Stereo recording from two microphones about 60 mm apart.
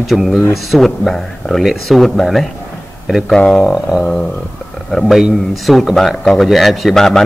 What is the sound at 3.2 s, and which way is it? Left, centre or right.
Speech, centre.